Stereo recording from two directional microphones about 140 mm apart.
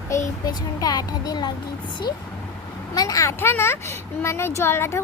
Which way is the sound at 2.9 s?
25° left (ahead or behind).